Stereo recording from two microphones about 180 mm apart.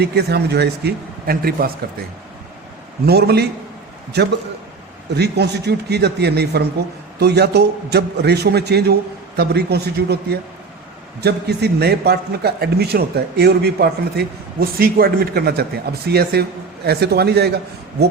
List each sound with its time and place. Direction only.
0.0 s a man's voice: 65° right (ahead or behind)
3.1 s a man's voice: 60° right (ahead or behind)